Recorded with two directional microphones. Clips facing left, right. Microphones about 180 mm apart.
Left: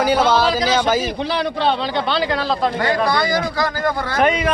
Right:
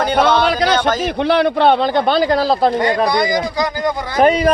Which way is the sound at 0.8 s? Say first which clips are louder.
Even; 10° left (ahead or behind).